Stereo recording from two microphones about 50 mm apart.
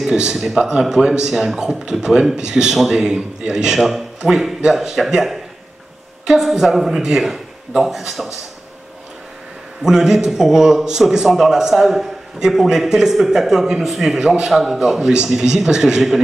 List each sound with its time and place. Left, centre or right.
0.1 s a man's voice: centre
9.8 s a man's voice: centre